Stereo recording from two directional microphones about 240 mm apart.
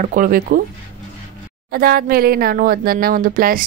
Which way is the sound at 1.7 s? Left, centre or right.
Right.